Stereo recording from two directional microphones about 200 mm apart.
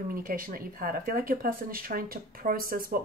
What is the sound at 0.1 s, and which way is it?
Speech, 45° right (ahead or behind).